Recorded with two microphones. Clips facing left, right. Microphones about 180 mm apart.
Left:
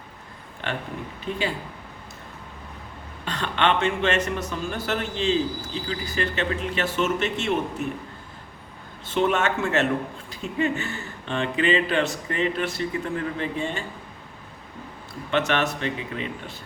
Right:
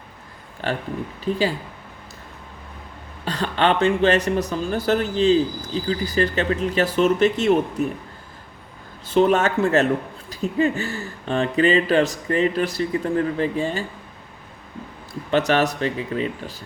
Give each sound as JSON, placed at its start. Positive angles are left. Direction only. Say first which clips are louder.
{"t": 0.6, "sound": "a man's voice", "louder": "right 5 dB", "side_deg": -35}
{"t": 3.2, "sound": "a man's voice", "louder": "right 3 dB", "side_deg": -35}
{"t": 9.0, "sound": "a man's voice", "louder": "right 5 dB", "side_deg": -35}
{"t": 15.3, "sound": "a man's voice", "louder": "right 4 dB", "side_deg": -35}